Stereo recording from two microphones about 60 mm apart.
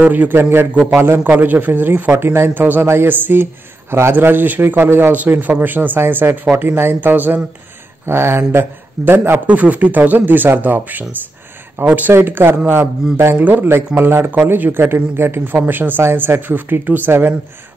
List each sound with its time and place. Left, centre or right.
0.0 s speech: right
0.4 s a man's voice: right
1.3 s a man's voice: right
5.1 s a man's voice: right
9.5 s speech: right
12.1 s a man's voice: right
15.4 s a man's voice: right